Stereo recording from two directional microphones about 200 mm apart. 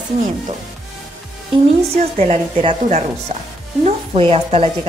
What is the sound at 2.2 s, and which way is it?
A woman's voice, 30° right (ahead or behind).